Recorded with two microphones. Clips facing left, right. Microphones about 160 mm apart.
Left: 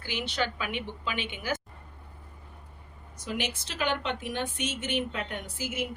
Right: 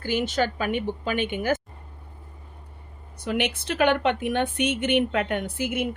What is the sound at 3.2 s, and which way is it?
Speech, 65° right (ahead or behind).